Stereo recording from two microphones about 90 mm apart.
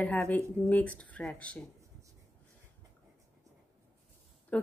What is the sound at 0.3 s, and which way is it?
Speech, 15° left (ahead or behind).